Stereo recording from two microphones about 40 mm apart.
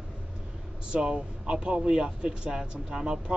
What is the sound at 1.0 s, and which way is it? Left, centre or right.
Speech, right.